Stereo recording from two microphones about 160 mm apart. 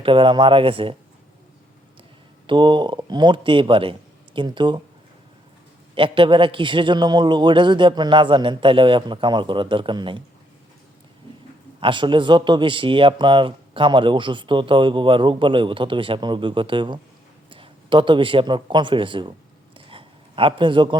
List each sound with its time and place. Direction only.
0.0 s a man's voice: 30° right (ahead or behind)
2.5 s speech: 30° right (ahead or behind)
5.9 s a man's voice: 30° right (ahead or behind)
11.8 s a man's voice: 30° right (ahead or behind)
19.7 s a sound: 35° right (ahead or behind)